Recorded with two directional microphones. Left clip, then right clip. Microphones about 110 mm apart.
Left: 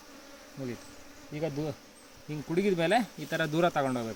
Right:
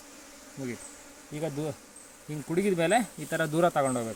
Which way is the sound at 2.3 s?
Centre (ahead or behind).